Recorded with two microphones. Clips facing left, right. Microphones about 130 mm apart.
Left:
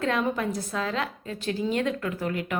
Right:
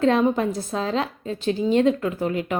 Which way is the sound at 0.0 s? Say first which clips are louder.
Right 7 dB; 30° right (ahead or behind).